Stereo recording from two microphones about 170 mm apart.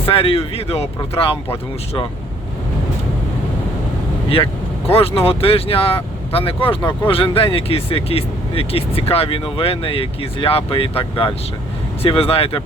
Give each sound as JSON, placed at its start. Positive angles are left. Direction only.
{"t": 0.0, "sound": "speech", "side_deg": 30}
{"t": 4.9, "sound": "speech", "side_deg": 35}